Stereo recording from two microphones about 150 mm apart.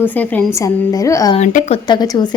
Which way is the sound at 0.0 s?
10° left (ahead or behind).